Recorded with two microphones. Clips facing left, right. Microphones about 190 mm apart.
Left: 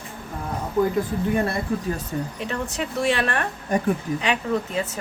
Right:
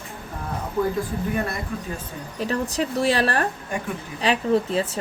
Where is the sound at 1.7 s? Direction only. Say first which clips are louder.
Left 5 dB; 35° left (ahead or behind).